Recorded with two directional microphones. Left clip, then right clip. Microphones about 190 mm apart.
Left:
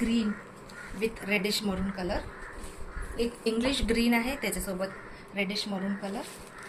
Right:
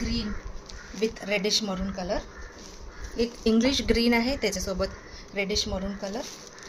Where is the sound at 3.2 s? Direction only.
45° right (ahead or behind).